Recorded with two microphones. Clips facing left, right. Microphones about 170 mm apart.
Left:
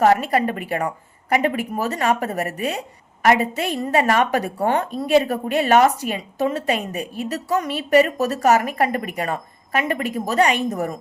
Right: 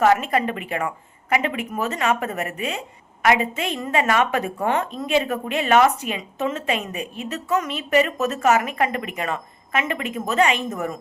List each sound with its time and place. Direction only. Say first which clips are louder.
0.0 s a woman's voice: left 2 dB; 35° left (ahead or behind)